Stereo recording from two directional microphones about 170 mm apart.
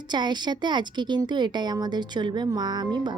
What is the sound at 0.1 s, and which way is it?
A woman's voice, 25° right (ahead or behind).